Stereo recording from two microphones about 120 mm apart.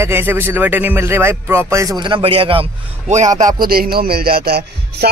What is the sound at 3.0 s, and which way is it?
Speech, 85° right.